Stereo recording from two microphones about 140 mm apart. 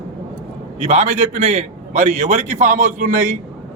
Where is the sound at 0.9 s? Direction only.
50° right (ahead or behind).